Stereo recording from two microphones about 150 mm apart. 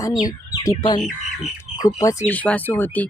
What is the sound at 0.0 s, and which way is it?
Speech, 25° left (ahead or behind).